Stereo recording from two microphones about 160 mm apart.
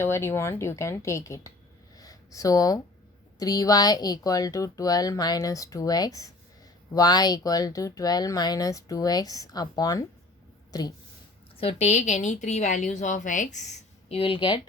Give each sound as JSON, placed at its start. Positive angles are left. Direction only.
{"t": 0.0, "sound": "a woman's voice", "side_deg": 15}
{"t": 11.5, "sound": "a woman's voice", "side_deg": 35}
{"t": 14.1, "sound": "speech", "side_deg": 35}